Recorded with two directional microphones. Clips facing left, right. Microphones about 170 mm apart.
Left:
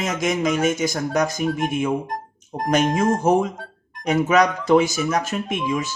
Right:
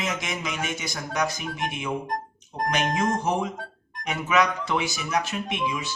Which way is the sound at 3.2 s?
45° left (ahead or behind).